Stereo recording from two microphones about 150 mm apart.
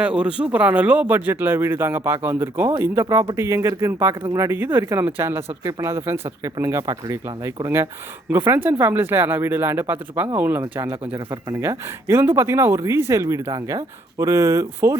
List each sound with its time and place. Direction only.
0.0 s a man's voice: 5° right (ahead or behind)
11.3 s speech: 20° right (ahead or behind)